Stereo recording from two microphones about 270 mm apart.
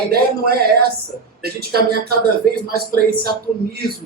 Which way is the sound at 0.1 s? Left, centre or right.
Right.